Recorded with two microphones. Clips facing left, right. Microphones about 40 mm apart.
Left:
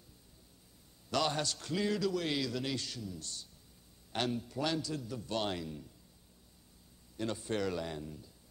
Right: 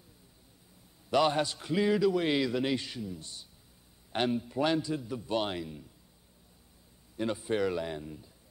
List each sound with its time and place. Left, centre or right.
1.1 s a man's voice: right
7.2 s a man's voice: centre